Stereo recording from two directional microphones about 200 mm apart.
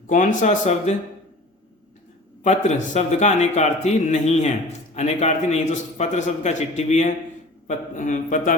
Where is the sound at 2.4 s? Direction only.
35° left (ahead or behind).